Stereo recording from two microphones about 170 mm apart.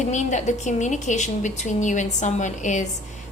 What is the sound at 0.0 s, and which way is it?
A woman's voice, 45° left (ahead or behind).